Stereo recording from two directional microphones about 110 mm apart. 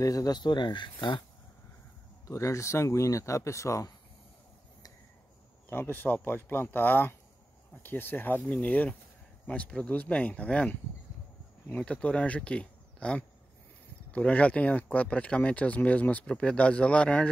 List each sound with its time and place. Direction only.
0.0 s speech: 35° left (ahead or behind)
2.2 s speech: 25° left (ahead or behind)
5.7 s speech: 15° left (ahead or behind)